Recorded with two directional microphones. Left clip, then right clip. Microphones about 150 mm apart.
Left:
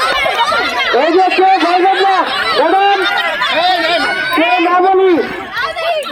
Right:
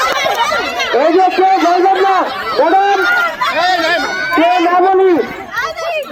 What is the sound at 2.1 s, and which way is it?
Chatter, 60° left (ahead or behind).